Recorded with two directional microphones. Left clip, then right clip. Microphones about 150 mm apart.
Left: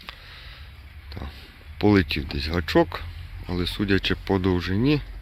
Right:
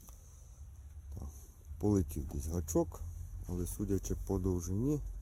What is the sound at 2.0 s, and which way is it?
Speech, 15° right (ahead or behind).